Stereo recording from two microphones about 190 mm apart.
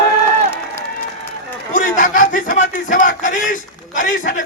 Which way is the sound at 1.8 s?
45° left (ahead or behind).